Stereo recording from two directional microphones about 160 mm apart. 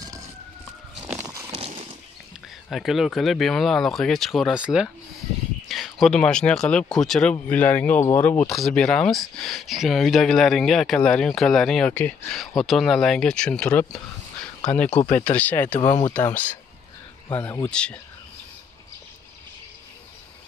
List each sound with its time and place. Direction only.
1.5 s horse: 40° right (ahead or behind)
2.7 s speech: centre (ahead or behind)
8.5 s speech: centre (ahead or behind)
14.9 s speech: 45° left (ahead or behind)
15.3 s speech: 10° left (ahead or behind)